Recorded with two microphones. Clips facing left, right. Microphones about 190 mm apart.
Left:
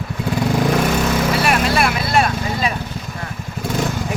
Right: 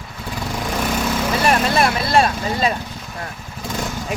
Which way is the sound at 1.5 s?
35° right (ahead or behind).